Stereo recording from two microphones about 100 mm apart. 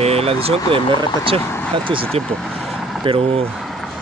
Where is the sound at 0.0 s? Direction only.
90° right; by 1.4 s 65° right (ahead or behind).